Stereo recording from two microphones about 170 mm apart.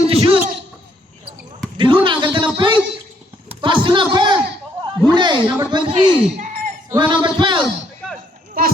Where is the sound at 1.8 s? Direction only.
30° right (ahead or behind).